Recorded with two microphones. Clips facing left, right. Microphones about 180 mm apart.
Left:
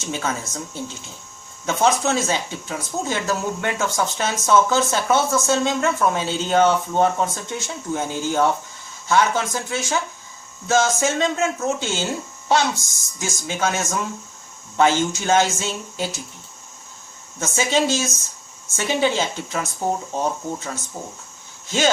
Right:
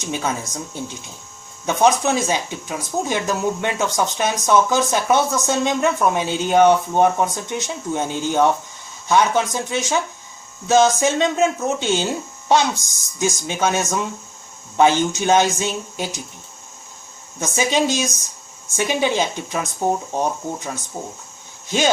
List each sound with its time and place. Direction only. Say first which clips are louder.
0.0 s speech: right 2 dB; 15° right (ahead or behind)
17.4 s speech: right 1 dB; 15° right (ahead or behind)